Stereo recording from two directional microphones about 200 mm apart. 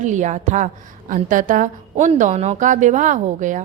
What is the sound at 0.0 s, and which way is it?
A woman's voice, 35° right (ahead or behind).